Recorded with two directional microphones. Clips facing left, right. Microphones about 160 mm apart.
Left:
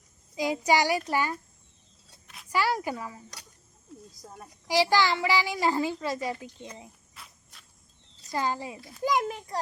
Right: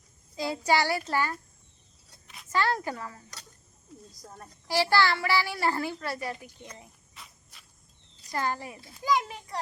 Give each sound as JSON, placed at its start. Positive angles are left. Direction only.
{"t": 0.3, "sound": "a woman's voice", "side_deg": 15}
{"t": 2.2, "sound": "a sound", "side_deg": 0}
{"t": 2.5, "sound": "a woman's voice", "side_deg": 10}
{"t": 7.1, "sound": "cricket", "side_deg": 0}
{"t": 8.3, "sound": "a woman's voice", "side_deg": 15}
{"t": 9.0, "sound": "a child's voice", "side_deg": 45}